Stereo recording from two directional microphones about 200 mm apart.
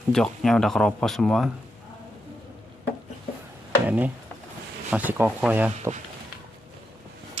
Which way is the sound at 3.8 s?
10° right (ahead or behind).